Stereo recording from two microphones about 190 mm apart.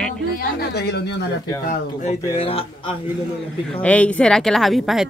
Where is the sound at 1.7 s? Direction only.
40° left (ahead or behind).